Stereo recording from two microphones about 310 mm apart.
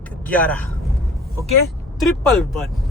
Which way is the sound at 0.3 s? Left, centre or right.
Centre.